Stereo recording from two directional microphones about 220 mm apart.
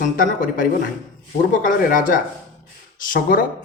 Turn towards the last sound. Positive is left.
turn(degrees=40)  # may be behind; listen again after turning